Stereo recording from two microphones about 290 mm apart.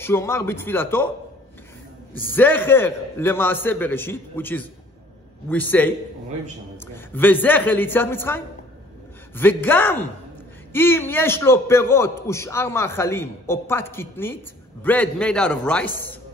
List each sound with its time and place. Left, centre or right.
0.0 s a man's voice: centre
2.1 s a man's voice: centre
7.1 s a man's voice: centre